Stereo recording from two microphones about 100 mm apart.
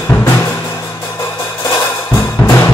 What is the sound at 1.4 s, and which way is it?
Music, 40° left (ahead or behind).